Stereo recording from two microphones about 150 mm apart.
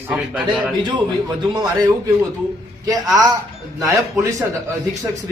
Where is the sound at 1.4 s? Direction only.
25° right (ahead or behind).